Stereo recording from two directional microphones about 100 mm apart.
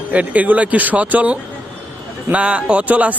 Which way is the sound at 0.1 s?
15° right (ahead or behind).